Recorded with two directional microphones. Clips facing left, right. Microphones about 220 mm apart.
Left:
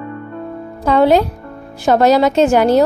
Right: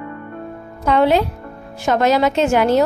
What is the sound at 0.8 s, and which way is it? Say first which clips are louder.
A woman's voice: left 3 dB; 35° left (ahead or behind).